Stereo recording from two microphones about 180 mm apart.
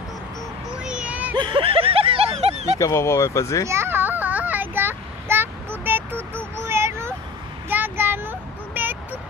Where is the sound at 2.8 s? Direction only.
15° left (ahead or behind).